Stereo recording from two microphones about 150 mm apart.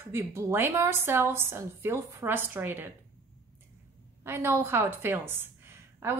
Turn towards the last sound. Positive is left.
turn(degrees=-15)  # may be behind; listen again after turning